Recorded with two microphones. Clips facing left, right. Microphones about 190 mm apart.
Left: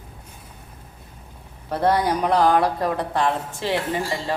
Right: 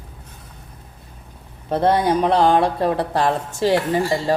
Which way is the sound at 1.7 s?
25° right (ahead or behind).